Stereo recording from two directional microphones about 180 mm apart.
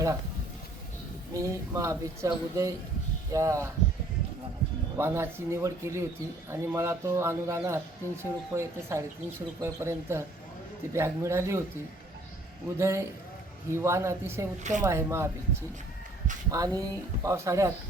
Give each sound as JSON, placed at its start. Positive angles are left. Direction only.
{"t": 1.3, "sound": "a man's voice", "side_deg": -15}
{"t": 4.9, "sound": "a man's voice", "side_deg": -15}
{"t": 12.7, "sound": "a man's voice", "side_deg": -15}
{"t": 14.6, "sound": "speech", "side_deg": -40}
{"t": 14.8, "sound": "a man's voice", "side_deg": -15}
{"t": 16.5, "sound": "speech", "side_deg": -20}